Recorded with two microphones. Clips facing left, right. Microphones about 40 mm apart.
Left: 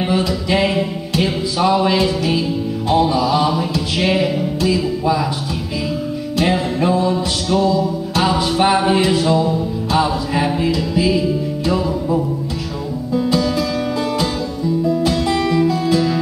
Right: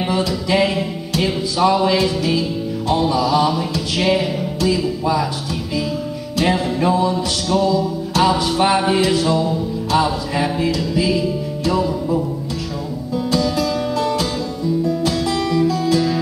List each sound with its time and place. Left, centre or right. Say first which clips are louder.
0.0 s music: left 1 dB; centre
6.3 s music: even; centre
14.9 s music: left 2 dB; centre